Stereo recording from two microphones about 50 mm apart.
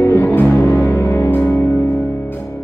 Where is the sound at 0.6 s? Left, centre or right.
Left.